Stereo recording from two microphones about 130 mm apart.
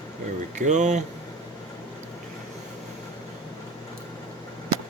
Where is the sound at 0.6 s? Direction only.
65° right (ahead or behind).